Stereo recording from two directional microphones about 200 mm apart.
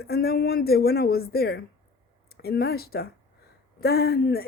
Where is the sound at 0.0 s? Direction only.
50° left (ahead or behind).